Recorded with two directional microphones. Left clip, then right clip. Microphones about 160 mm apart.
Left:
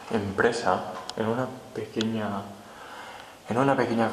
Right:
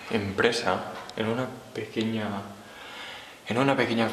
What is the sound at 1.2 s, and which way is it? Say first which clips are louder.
Speech: left 1 dB; 50° right (ahead or behind).